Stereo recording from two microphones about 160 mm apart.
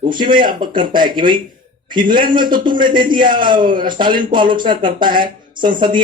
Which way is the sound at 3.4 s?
30° right (ahead or behind).